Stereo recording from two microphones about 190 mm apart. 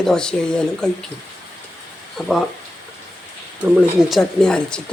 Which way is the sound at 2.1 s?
Centre (ahead or behind).